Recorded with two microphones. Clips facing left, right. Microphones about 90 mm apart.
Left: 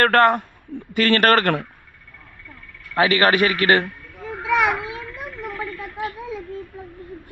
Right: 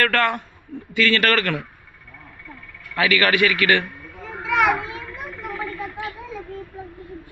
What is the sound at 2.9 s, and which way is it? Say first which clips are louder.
Speech: left 2 dB; 35° left (ahead or behind).